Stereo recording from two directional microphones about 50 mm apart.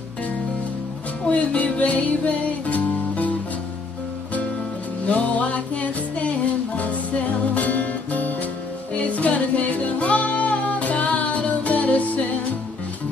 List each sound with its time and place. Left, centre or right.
1.3 s music: left
5.0 s music: left